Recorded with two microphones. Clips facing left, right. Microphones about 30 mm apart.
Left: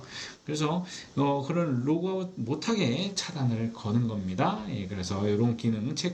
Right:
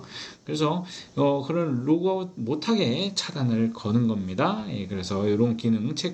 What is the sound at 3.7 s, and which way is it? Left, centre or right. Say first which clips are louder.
Speech: right 5 dB; right.